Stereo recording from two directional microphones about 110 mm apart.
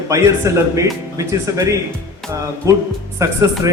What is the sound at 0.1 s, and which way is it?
Speech, 30° right (ahead or behind).